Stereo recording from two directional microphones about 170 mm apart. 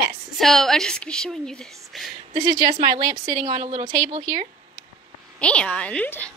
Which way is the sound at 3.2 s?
45° right (ahead or behind).